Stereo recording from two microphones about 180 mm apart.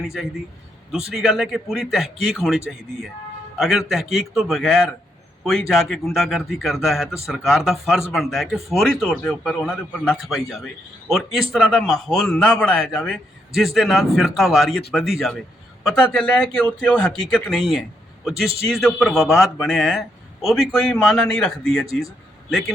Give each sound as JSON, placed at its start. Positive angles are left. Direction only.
{"t": 0.0, "sound": "a man's voice", "side_deg": 0}
{"t": 3.6, "sound": "a man's voice", "side_deg": 0}